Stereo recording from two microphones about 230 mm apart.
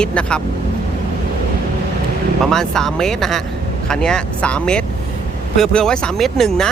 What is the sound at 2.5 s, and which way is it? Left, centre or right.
Speech, centre.